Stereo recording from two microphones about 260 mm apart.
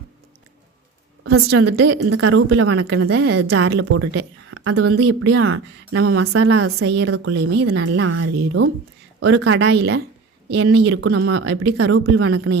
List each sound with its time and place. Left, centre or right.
1.2 s a woman's voice: right
2.0 s speech: right
2.3 s speech: right